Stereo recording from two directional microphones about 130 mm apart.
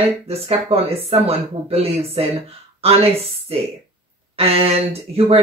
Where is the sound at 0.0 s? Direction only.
50° right (ahead or behind).